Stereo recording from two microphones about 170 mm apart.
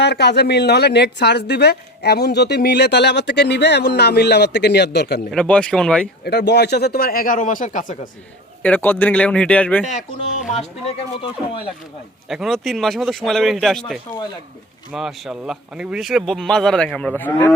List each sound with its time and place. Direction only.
0.0 s a woman's voice: 80° left
5.3 s speech: 5° left (ahead or behind)
6.2 s speech: 80° left; by 7.9 s 50° left (ahead or behind)
8.6 s speech: 10° left (ahead or behind)
9.8 s speech: 45° left (ahead or behind)
12.3 s speech: centre (ahead or behind)